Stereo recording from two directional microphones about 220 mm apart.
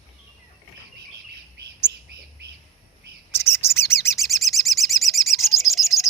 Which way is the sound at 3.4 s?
10° left (ahead or behind).